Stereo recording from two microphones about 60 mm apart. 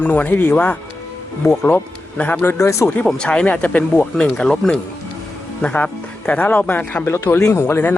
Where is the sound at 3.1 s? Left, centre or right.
Centre.